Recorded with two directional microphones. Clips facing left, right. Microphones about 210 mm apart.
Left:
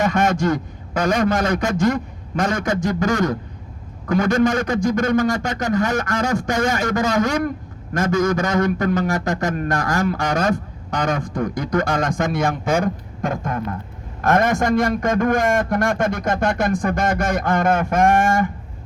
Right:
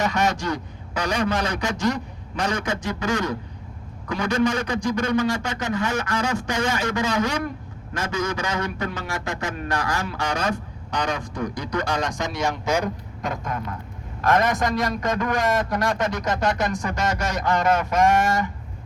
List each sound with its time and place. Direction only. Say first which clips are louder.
0.0 s a man's voice: left 5 dB; 50° left (ahead or behind)